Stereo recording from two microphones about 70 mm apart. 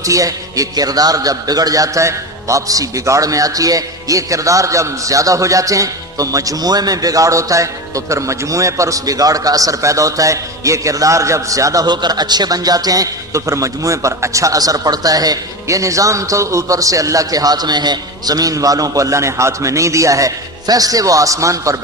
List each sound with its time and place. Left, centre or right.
0.0 s a man's voice: right
11.9 s a man's voice: right
15.6 s a man's voice: right